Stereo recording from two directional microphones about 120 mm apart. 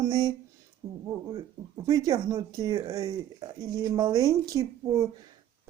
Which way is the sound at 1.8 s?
30° right (ahead or behind).